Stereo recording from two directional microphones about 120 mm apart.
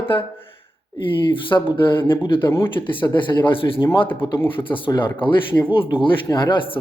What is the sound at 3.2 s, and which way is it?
Speech, 40° left (ahead or behind).